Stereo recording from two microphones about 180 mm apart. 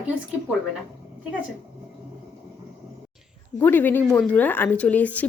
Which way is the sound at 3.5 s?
10° left (ahead or behind).